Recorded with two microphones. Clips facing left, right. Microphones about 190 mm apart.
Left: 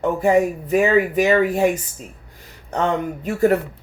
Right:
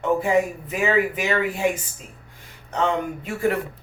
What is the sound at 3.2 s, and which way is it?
Speech, 40° left (ahead or behind).